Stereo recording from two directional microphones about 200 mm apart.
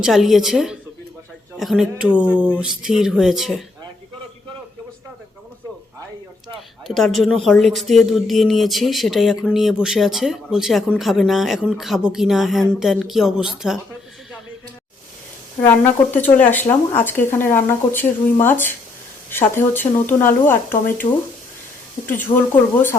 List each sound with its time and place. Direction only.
0.0 s speech: centre (ahead or behind)
6.8 s speech: centre (ahead or behind)
15.6 s speech: 10° left (ahead or behind)
22.3 s speech: 30° left (ahead or behind)
22.7 s speech: 10° left (ahead or behind)